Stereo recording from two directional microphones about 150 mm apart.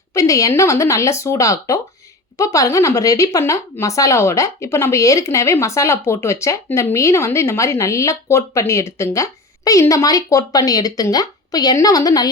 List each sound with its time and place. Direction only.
0.1 s speech: 20° left (ahead or behind)